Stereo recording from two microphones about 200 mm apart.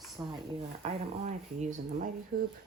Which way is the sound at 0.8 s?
35° right (ahead or behind).